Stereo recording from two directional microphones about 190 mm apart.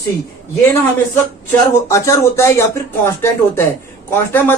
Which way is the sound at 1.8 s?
15° left (ahead or behind).